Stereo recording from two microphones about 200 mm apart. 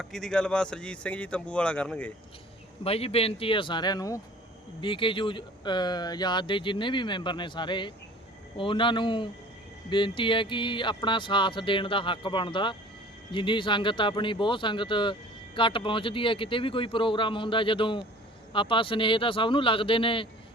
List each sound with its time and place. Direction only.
0.0 s speech: centre (ahead or behind)
2.8 s speech: 30° left (ahead or behind)